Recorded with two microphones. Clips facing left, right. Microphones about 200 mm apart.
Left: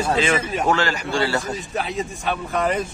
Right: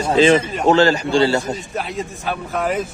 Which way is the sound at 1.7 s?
Centre (ahead or behind).